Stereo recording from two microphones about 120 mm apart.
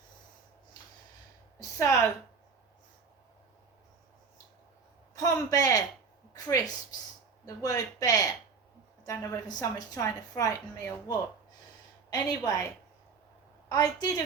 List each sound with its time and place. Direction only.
1.5 s a woman's voice: 25° left (ahead or behind)
5.1 s a man's voice: 30° left (ahead or behind)